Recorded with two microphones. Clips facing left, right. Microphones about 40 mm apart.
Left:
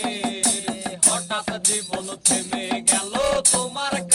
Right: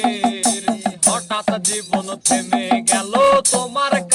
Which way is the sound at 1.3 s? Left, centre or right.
Right.